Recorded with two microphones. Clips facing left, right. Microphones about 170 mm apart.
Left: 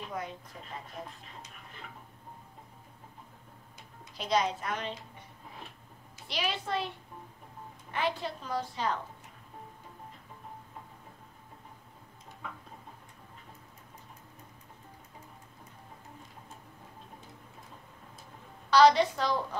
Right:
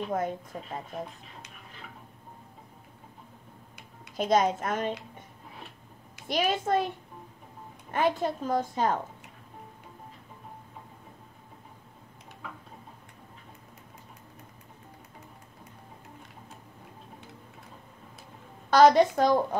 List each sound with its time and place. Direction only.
0.1 s a woman's voice: 50° right (ahead or behind)
4.2 s a woman's voice: 50° right (ahead or behind)
6.2 s a woman's voice: 50° right (ahead or behind)
7.9 s a woman's voice: 50° right (ahead or behind)
18.7 s a woman's voice: 50° right (ahead or behind)